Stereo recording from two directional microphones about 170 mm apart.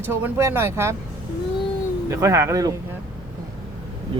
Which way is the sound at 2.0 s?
15° right (ahead or behind).